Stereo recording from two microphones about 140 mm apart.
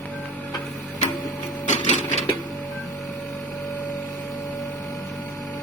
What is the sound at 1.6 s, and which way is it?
Printer, 60° left (ahead or behind).